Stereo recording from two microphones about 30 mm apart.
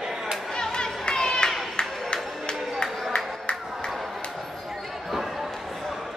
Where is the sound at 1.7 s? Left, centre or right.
Left.